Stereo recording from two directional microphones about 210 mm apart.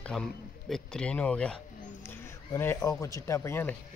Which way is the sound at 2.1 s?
10° left (ahead or behind).